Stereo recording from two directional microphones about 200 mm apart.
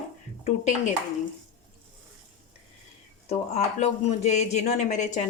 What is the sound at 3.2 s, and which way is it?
A man's voice, 35° left (ahead or behind).